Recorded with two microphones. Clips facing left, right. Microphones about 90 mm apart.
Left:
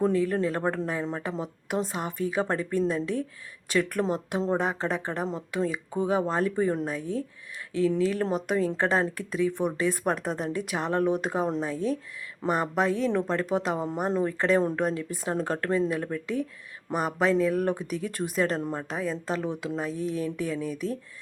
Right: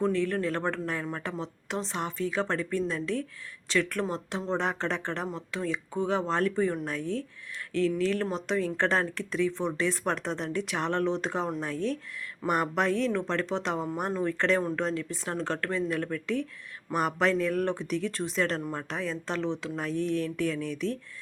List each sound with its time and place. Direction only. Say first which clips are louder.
0.0 s speech: left 3 dB; 10° left (ahead or behind)
8.5 s speech: left 2 dB; 20° left (ahead or behind)
8.8 s speech: left 2 dB; 10° left (ahead or behind)
14.1 s speech: left 4 dB; 20° left (ahead or behind)
14.3 s speech: left 3 dB; 10° left (ahead or behind)
18.9 s speech: left 3 dB; 5° left (ahead or behind)